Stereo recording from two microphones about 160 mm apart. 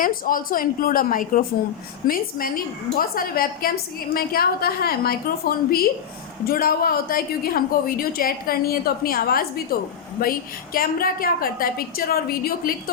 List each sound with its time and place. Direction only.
0.0 s a woman's voice: 60° left (ahead or behind)
10.8 s a woman's voice: 65° left (ahead or behind)